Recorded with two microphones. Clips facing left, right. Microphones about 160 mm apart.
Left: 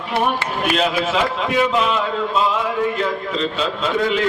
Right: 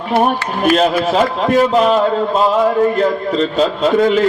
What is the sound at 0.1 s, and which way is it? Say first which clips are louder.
A man's voice: right 5 dB; 45° right (ahead or behind).